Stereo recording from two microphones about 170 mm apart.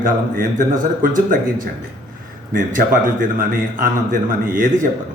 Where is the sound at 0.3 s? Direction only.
50° right (ahead or behind).